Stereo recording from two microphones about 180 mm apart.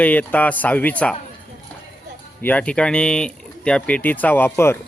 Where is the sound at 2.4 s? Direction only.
10° left (ahead or behind).